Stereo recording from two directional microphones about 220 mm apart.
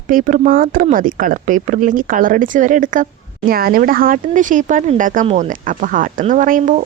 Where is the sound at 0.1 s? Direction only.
35° right (ahead or behind).